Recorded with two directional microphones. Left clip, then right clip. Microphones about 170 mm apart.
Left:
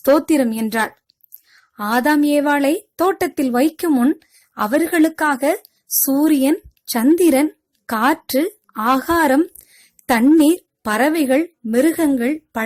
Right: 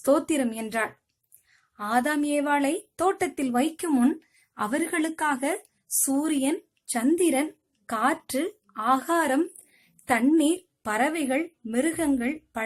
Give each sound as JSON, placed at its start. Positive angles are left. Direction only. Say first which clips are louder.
{"t": 0.0, "sound": "a woman's voice", "louder": "left 9 dB", "side_deg": 40}